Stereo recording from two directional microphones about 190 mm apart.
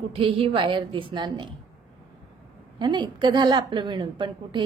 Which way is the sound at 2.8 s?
25° right (ahead or behind).